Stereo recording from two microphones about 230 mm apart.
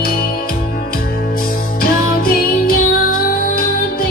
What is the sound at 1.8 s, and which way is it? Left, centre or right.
Music, left.